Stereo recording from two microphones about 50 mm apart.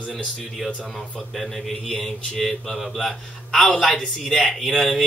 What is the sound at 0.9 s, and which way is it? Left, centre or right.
Speech, centre.